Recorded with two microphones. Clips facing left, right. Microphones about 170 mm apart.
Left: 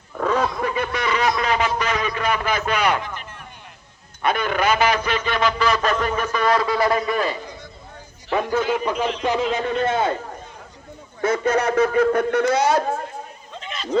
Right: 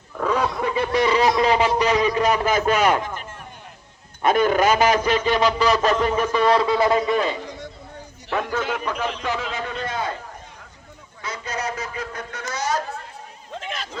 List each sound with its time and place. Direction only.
0.3 s goose: 10° right (ahead or behind)
0.6 s snicker: 25° right (ahead or behind)
1.4 s a man's voice: 30° right (ahead or behind)
8.4 s a man's voice: 10° left (ahead or behind)
11.2 s speech: 50° left (ahead or behind)